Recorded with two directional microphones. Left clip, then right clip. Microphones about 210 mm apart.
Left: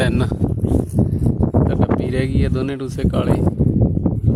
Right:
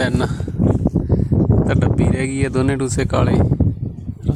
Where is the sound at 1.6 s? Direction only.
20° right (ahead or behind).